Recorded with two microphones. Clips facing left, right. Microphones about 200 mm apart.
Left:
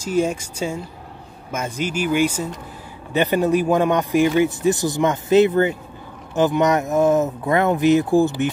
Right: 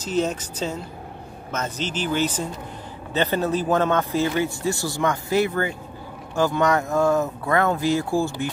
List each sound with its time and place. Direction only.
0.0 s a man's voice: 10° left (ahead or behind)